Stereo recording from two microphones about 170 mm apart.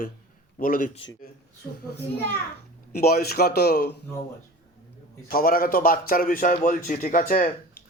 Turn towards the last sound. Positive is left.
turn(degrees=50)  # may be behind; listen again after turning